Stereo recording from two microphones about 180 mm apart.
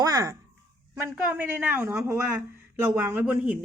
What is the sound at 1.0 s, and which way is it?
Speech, 10° right (ahead or behind).